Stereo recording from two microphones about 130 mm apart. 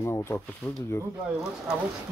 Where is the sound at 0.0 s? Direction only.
20° left (ahead or behind).